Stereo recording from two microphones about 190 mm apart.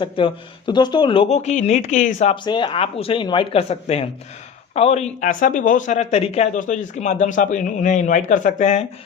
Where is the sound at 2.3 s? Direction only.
25° left (ahead or behind).